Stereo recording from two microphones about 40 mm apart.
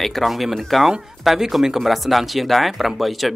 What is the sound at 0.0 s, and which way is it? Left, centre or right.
Speech, centre.